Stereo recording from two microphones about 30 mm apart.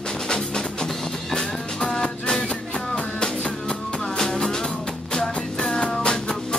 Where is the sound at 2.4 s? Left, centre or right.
Left.